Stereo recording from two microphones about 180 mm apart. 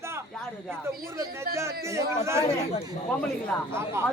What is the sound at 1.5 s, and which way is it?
Speech, 15° right (ahead or behind).